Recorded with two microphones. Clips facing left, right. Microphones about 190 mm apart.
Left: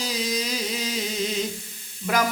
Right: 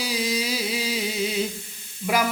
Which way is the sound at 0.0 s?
10° right (ahead or behind).